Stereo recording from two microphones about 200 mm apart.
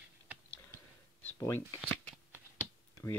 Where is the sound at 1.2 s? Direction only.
10° left (ahead or behind).